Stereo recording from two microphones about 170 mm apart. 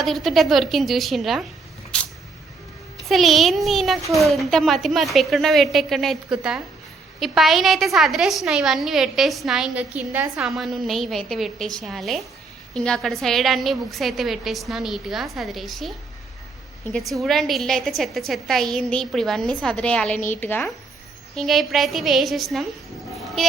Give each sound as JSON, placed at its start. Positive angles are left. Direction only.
{"t": 0.0, "sound": "a woman's voice", "side_deg": 0}
{"t": 3.0, "sound": "a woman's voice", "side_deg": 0}
{"t": 10.3, "sound": "a woman's voice", "side_deg": 0}
{"t": 21.3, "sound": "a woman's voice", "side_deg": 0}
{"t": 23.1, "sound": "vehicle", "side_deg": 0}